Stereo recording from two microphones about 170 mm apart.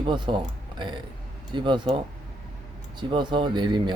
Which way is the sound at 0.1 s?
30° right (ahead or behind).